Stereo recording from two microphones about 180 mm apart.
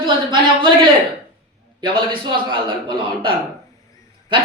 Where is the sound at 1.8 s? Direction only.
30° right (ahead or behind).